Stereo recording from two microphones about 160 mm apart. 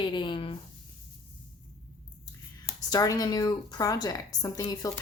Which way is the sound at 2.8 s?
20° left (ahead or behind).